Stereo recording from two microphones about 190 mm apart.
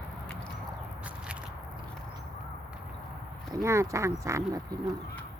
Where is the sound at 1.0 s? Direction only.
5° right (ahead or behind).